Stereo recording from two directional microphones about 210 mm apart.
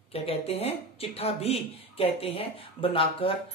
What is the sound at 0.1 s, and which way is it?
Speech, 30° left (ahead or behind).